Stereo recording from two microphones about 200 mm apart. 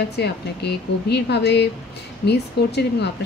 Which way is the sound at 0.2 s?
55° left (ahead or behind).